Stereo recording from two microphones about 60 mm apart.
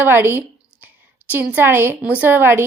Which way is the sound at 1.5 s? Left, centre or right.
Right.